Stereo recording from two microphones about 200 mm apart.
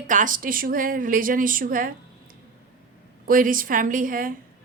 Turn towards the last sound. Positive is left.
turn(degrees=-45)  # may be behind; listen again after turning